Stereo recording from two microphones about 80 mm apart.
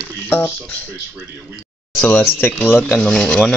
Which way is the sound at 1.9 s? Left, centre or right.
Centre.